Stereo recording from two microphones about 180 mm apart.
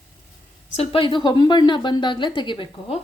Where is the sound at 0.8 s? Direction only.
30° left (ahead or behind).